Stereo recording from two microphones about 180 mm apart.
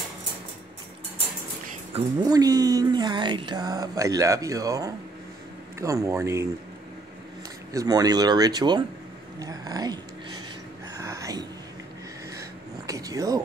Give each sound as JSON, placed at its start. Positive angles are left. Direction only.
{"t": 2.0, "sound": "speech", "side_deg": -20}
{"t": 7.7, "sound": "speech", "side_deg": -20}
{"t": 11.0, "sound": "whispering", "side_deg": -15}
{"t": 12.4, "sound": "a sound", "side_deg": -20}